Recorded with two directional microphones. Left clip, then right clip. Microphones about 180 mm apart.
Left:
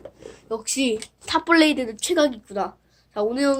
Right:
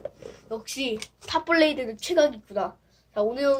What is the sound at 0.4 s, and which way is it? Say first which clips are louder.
A woman's voice: left 6 dB; 45° left (ahead or behind).